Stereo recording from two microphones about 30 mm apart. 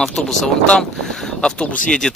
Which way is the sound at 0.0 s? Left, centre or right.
Centre.